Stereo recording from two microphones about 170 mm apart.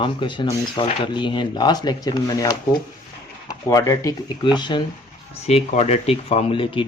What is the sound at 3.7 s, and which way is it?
Speech, 20° left (ahead or behind).